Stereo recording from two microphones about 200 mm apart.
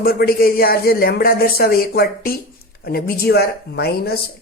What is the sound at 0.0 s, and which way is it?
Speech, 50° left (ahead or behind).